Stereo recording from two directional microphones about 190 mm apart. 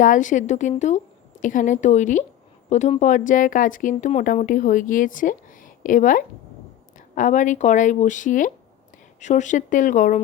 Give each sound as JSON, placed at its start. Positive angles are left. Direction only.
{"t": 0.0, "sound": "a woman's voice", "side_deg": 40}